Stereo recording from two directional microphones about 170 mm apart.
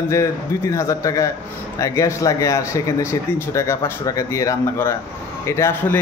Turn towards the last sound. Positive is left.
turn(degrees=15)  # may be behind; listen again after turning